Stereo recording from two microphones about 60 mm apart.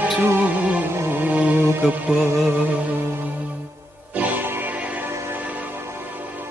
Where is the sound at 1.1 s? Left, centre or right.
Right.